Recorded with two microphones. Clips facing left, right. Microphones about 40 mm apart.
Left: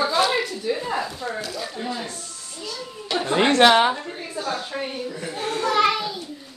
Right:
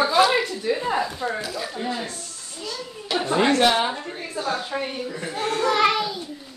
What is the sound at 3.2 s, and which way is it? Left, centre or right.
Speech, left.